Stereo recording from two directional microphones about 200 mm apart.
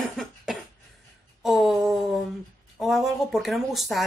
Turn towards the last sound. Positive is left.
turn(degrees=0)  # may be behind; listen again after turning